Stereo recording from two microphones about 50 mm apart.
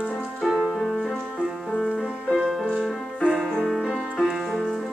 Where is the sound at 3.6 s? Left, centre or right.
Centre.